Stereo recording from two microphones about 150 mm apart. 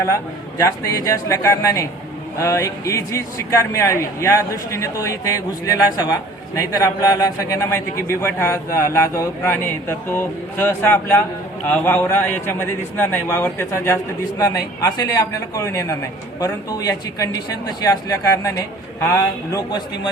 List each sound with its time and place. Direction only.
0.6 s a man's voice: 25° left (ahead or behind)